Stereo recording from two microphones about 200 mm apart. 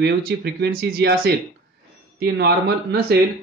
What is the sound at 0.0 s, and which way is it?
Speech, 55° right (ahead or behind).